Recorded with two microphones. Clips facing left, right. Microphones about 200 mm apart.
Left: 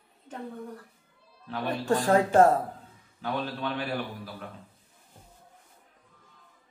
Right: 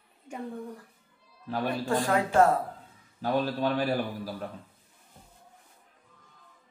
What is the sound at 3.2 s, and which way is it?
A man's voice, 40° right (ahead or behind).